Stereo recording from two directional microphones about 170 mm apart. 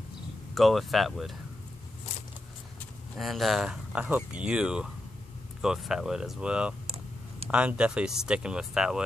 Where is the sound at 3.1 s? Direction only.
Centre (ahead or behind).